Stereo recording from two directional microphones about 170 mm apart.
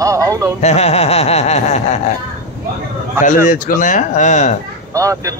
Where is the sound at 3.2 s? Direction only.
50° left (ahead or behind).